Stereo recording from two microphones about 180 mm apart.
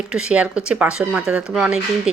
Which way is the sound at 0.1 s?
5° right (ahead or behind).